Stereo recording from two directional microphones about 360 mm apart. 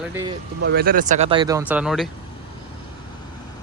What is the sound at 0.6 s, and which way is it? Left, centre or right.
Speech, right.